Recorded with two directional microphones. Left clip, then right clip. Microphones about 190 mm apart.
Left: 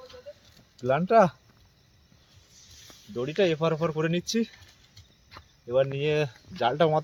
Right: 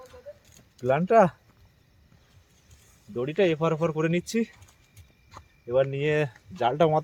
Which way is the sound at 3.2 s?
10° right (ahead or behind).